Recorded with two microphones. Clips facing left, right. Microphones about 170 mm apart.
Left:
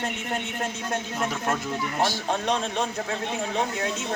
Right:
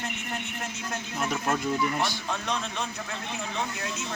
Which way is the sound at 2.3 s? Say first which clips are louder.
Left 6 dB; 40° left (ahead or behind).